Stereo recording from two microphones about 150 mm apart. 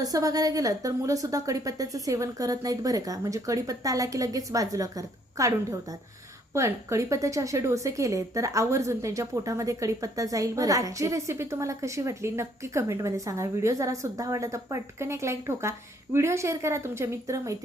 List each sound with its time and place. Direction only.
0.0 s speech: 25° right (ahead or behind)